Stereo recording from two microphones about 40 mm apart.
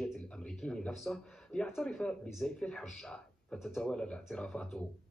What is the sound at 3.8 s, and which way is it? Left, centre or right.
Speech, left.